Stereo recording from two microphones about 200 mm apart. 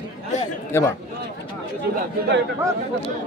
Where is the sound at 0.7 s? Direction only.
15° left (ahead or behind).